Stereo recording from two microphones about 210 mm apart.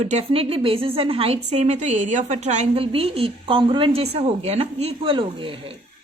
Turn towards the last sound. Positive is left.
turn(degrees=-25)  # may be behind; listen again after turning